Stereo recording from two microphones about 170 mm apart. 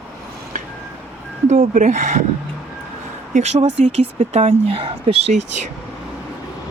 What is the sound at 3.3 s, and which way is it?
Speech, 40° right (ahead or behind).